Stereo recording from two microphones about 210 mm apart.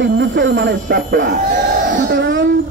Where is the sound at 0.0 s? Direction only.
60° right (ahead or behind).